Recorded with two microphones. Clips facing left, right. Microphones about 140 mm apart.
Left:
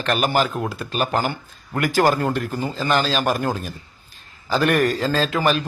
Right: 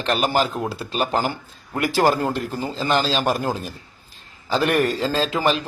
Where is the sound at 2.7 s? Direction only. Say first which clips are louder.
Even; 30° right (ahead or behind).